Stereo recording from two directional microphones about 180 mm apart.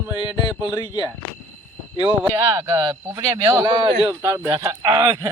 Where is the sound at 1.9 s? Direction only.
25° left (ahead or behind).